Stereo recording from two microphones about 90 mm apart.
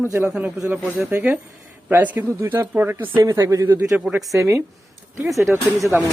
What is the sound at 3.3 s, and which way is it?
Speech, 40° right (ahead or behind).